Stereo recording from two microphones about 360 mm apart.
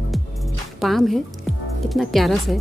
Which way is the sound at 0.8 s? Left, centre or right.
Centre.